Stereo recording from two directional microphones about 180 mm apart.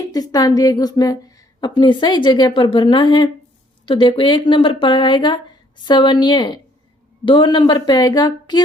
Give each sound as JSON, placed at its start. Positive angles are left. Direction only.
{"t": 0.1, "sound": "a woman's voice", "side_deg": 20}